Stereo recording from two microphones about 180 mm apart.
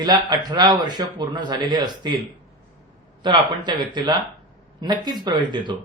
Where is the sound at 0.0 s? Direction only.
25° right (ahead or behind).